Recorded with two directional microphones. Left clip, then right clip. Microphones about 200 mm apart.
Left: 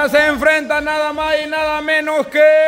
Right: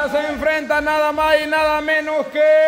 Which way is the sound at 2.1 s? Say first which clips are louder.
Left 5 dB; 30° left (ahead or behind).